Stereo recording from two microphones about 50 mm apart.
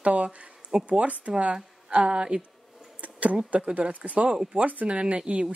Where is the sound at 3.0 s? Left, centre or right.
Right.